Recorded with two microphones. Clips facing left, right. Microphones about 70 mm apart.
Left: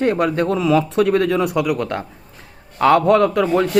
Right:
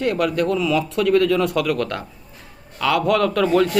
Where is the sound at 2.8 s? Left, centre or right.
Left.